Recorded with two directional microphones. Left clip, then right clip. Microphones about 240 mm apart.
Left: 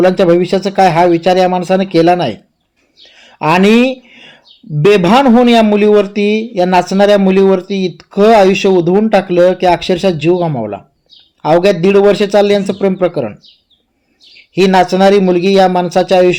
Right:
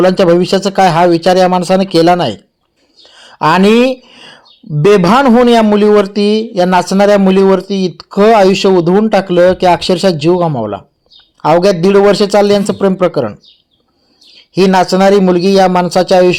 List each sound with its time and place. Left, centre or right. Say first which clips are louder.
0.0 s speech: right 1 dB; right
14.5 s speech: even; centre